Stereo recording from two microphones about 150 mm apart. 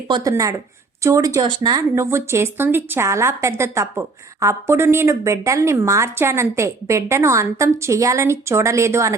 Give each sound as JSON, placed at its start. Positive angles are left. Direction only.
{"t": 0.1, "sound": "a woman's voice", "side_deg": -25}